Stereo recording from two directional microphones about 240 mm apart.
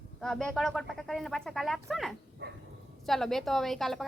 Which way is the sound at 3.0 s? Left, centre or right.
Centre.